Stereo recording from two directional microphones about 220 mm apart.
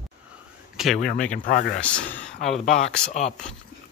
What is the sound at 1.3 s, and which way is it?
Speech, 40° left (ahead or behind).